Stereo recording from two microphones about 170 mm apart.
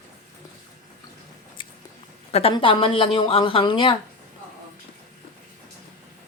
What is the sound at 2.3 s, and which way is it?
Speech, 35° left (ahead or behind).